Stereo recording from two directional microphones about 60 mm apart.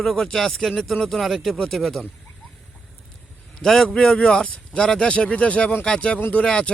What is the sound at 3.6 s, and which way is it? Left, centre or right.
A man's voice, centre.